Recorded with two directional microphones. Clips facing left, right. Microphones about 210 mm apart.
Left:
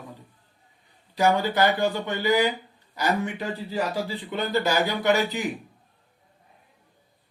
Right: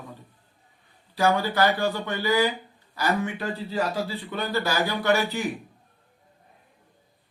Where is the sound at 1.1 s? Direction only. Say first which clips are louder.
Left 1 dB; 20° left (ahead or behind).